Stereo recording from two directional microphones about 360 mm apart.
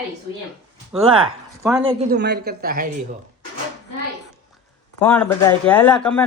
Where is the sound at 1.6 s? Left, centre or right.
Centre.